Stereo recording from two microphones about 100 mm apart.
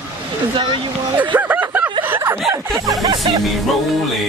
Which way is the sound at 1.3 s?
15° right (ahead or behind).